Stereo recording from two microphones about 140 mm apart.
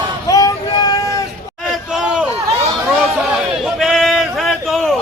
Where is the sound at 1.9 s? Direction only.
5° right (ahead or behind).